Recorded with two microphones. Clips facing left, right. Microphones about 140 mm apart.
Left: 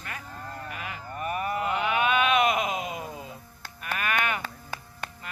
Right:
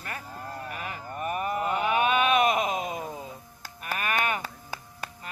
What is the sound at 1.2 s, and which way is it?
Speech, 35° right (ahead or behind).